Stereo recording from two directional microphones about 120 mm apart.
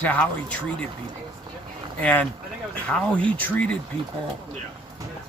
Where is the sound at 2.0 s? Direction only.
10° left (ahead or behind).